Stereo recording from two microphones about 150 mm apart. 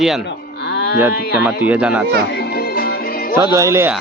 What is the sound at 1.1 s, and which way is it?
Speech, 90° left.